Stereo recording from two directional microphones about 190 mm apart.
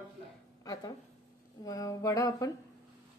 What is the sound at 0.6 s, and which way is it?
A woman's voice, 20° left (ahead or behind).